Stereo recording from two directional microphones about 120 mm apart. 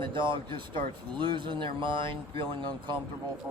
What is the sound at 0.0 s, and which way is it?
Speech, 40° right (ahead or behind).